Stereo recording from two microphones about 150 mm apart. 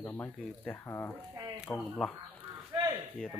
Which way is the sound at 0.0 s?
15° left (ahead or behind).